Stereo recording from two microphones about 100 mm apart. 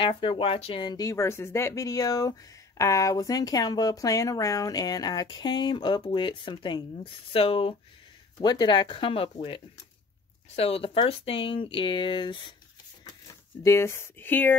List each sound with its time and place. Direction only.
0.0 s speech: 60° left (ahead or behind)
0.8 s speech: 35° left (ahead or behind); by 6.8 s 55° left (ahead or behind)
7.3 s speech: 65° left (ahead or behind)
8.4 s speech: 45° left (ahead or behind)
13.6 s speech: 30° left (ahead or behind)